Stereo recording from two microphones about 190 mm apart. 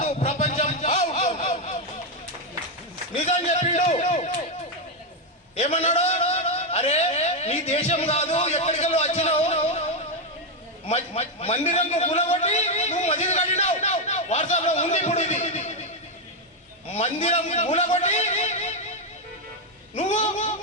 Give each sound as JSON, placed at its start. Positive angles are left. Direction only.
{"t": 0.3, "sound": "a sound", "side_deg": 40}
{"t": 1.3, "sound": "baby laughter", "side_deg": 35}
{"t": 3.1, "sound": "a man's voice", "side_deg": 35}
{"t": 5.5, "sound": "a man's voice", "side_deg": 35}
{"t": 10.8, "sound": "a man's voice", "side_deg": 35}
{"t": 16.9, "sound": "a man's voice", "side_deg": 35}
{"t": 20.0, "sound": "a man's voice", "side_deg": 40}